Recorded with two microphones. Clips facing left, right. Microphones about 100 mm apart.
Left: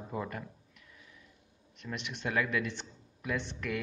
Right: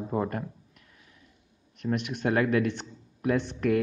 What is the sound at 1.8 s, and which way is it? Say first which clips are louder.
Speech: right 10 dB; 50° right (ahead or behind).